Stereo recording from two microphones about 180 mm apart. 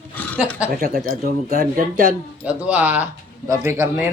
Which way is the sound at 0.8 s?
55° right (ahead or behind).